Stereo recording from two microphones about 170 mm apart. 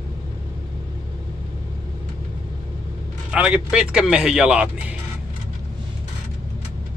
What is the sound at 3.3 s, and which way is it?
Speech, 5° right (ahead or behind).